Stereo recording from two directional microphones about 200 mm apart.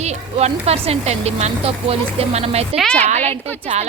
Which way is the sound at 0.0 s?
35° right (ahead or behind).